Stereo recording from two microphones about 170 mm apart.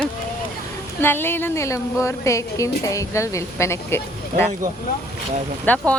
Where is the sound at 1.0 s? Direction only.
15° left (ahead or behind).